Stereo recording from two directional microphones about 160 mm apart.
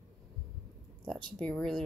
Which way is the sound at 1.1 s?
30° right (ahead or behind).